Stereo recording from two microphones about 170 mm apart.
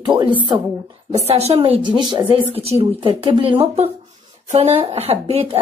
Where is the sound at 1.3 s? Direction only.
35° right (ahead or behind).